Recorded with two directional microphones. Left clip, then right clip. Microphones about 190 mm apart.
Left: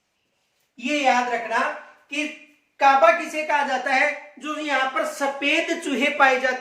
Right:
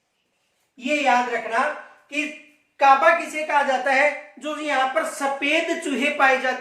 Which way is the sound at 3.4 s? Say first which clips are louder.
Right 2 dB; 15° right (ahead or behind).